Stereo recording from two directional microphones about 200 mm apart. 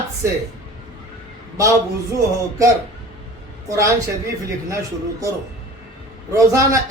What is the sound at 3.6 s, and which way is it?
Speech, 15° right (ahead or behind).